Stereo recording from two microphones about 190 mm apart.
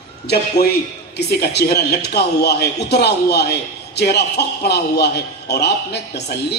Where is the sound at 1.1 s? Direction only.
60° left (ahead or behind).